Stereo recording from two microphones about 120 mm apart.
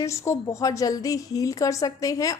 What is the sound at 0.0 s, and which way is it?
A woman's voice, 25° left (ahead or behind).